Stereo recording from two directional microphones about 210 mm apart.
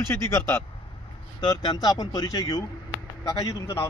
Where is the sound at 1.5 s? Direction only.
20° left (ahead or behind).